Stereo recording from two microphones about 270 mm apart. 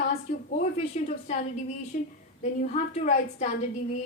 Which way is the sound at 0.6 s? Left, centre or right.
Left.